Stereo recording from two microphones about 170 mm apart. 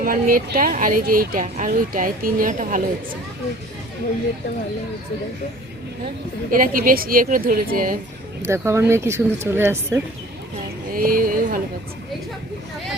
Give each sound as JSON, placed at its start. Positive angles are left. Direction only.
{"t": 0.0, "sound": "speech", "side_deg": -55}
{"t": 6.5, "sound": "speech", "side_deg": -55}
{"t": 8.4, "sound": "speech", "side_deg": -15}
{"t": 10.9, "sound": "speech", "side_deg": -55}